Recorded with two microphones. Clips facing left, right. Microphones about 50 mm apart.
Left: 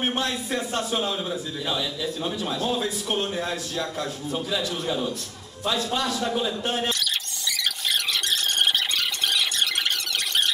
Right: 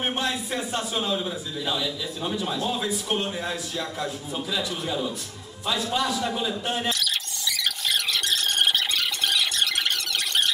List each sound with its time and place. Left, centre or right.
2.8 s speech: centre
3.3 s speech: centre
5.9 s a man's voice: right
6.9 s squeal: centre